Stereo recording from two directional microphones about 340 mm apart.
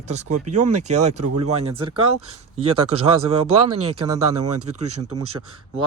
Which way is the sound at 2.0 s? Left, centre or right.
Right.